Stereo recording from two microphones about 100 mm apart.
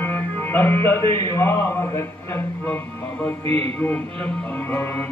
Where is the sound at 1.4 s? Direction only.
25° left (ahead or behind).